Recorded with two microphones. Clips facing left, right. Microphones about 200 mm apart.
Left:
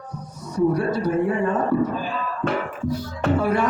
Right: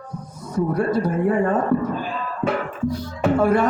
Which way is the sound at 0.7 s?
50° right (ahead or behind).